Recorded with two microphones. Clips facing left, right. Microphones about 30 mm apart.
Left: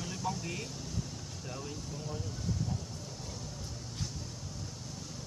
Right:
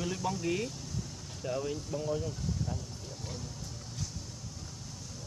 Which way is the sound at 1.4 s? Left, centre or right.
Centre.